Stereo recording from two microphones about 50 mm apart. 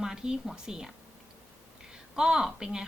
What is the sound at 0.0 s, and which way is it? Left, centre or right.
A woman's voice, centre.